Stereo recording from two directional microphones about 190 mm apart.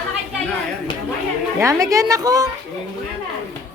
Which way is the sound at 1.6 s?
15° right (ahead or behind).